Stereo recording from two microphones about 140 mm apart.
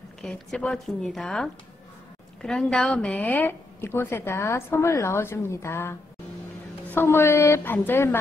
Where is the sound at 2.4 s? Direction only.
5° left (ahead or behind).